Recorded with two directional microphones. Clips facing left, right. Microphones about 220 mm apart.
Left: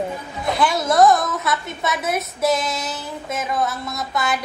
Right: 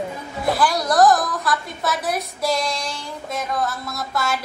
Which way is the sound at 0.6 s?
Centre (ahead or behind).